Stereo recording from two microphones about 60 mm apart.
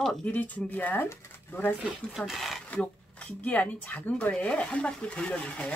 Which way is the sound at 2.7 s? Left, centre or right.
Left.